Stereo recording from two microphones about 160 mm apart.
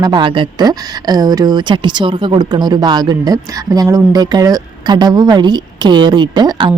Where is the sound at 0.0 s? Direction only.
30° right (ahead or behind).